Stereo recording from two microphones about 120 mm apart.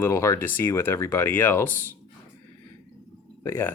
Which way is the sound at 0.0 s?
25° left (ahead or behind).